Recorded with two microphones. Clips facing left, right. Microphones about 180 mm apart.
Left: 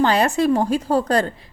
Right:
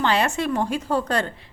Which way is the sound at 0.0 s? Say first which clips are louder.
Left 5 dB; 40° left (ahead or behind).